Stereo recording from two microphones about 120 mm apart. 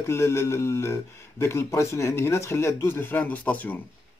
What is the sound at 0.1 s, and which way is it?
Speech, 25° left (ahead or behind).